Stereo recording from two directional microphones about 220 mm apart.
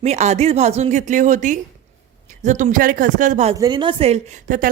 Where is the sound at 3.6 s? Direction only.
20° right (ahead or behind); by 4.7 s 40° right (ahead or behind).